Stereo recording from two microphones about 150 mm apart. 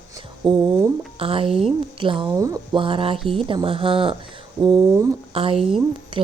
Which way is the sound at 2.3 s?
20° right (ahead or behind).